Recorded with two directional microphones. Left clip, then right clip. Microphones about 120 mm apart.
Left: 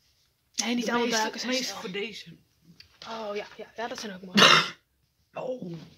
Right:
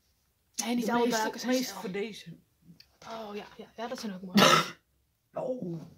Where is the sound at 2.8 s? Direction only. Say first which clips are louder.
Left 4 dB; 40° left (ahead or behind).